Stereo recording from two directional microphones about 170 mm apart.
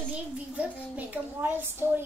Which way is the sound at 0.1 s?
10° right (ahead or behind).